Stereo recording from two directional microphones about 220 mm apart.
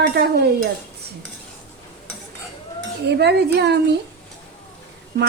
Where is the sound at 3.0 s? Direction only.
50° right (ahead or behind).